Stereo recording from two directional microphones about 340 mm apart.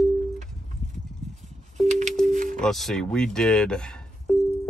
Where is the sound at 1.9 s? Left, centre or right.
Right.